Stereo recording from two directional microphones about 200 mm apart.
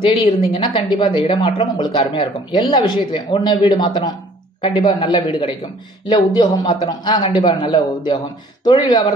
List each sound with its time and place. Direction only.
0.0 s speech: 25° left (ahead or behind)